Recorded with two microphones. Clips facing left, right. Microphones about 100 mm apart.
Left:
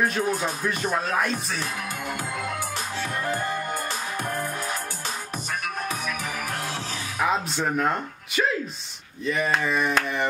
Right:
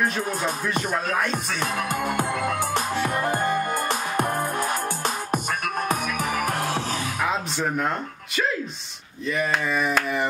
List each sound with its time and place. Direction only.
0.0 s speech: centre (ahead or behind)
1.6 s music: 50° right (ahead or behind)
7.2 s speech: centre (ahead or behind)